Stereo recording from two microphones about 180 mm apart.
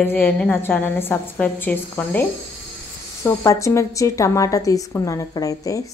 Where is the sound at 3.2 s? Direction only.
15° left (ahead or behind).